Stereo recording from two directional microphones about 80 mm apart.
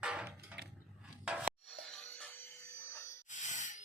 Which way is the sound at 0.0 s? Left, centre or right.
Centre.